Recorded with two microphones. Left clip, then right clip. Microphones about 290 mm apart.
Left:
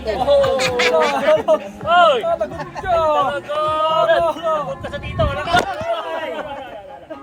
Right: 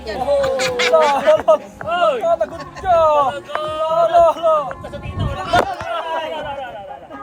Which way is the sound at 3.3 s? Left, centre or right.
Centre.